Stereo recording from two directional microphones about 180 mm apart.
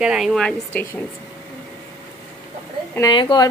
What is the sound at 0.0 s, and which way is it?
Speech, centre (ahead or behind).